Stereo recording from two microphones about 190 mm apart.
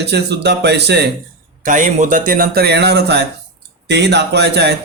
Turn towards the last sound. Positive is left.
turn(degrees=-60)  # may be behind; listen again after turning